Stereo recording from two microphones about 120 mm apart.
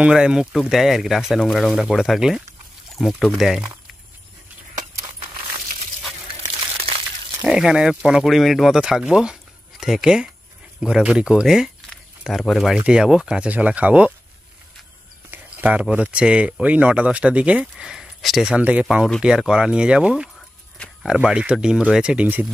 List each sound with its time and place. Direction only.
0.0 s speech: 5° right (ahead or behind)
6.9 s a sound: 50° right (ahead or behind)
7.4 s speech: 5° right (ahead or behind)
15.3 s speech: 10° right (ahead or behind)
20.3 s speech: 5° left (ahead or behind)